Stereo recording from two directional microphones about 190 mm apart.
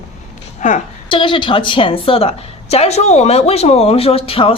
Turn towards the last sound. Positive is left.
turn(degrees=30)  # may be behind; listen again after turning